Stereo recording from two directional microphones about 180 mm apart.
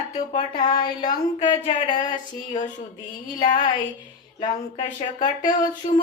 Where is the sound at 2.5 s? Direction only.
45° left (ahead or behind).